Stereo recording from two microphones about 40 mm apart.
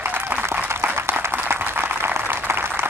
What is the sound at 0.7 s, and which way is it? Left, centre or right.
Applause, right.